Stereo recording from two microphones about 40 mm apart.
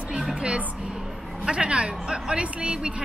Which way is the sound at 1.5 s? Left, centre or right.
Right.